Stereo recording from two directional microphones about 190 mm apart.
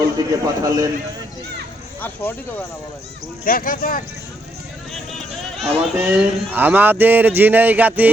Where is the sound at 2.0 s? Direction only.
10° left (ahead or behind).